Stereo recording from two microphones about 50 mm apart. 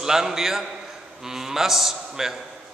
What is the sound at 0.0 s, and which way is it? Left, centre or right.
A man's voice, centre.